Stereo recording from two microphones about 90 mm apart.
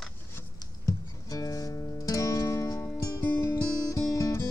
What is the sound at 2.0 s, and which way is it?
Music, 40° left (ahead or behind).